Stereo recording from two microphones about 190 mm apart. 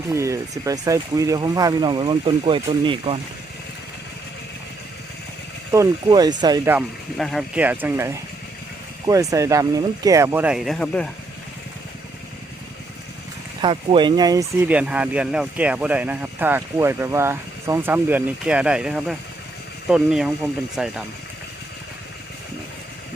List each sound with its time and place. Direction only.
0.1 s speech: 15° right (ahead or behind)
5.7 s speech: 20° right (ahead or behind)
7.2 s speech: centre (ahead or behind)
13.6 s speech: 25° right (ahead or behind)
14.7 s speech: 5° right (ahead or behind)